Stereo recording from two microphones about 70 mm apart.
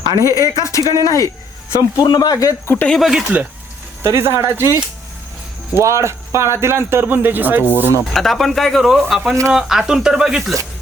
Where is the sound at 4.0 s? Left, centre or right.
Right.